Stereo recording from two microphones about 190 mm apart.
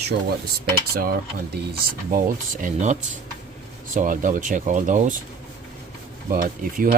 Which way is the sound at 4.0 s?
45° right (ahead or behind).